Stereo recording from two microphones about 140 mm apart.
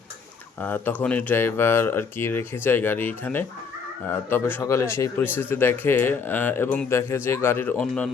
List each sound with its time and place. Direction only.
0.6 s speech: 15° left (ahead or behind)